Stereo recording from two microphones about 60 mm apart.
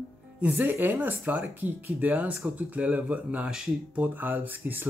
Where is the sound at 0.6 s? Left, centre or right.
Right.